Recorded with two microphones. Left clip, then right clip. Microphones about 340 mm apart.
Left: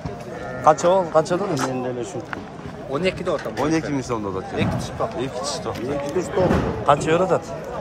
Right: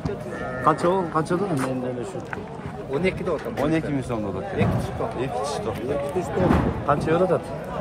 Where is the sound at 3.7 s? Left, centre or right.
Centre.